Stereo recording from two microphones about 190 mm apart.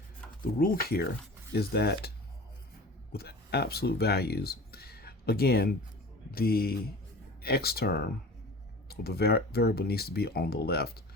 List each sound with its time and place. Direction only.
0.4 s speech: 50° left (ahead or behind)